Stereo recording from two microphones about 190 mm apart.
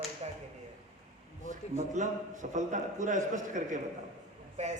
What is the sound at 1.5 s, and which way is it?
A man's voice, 40° right (ahead or behind).